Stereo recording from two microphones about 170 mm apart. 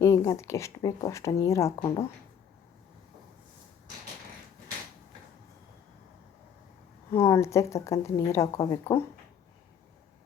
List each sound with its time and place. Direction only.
0.0 s speech: 15° left (ahead or behind)
7.1 s speech: 15° left (ahead or behind)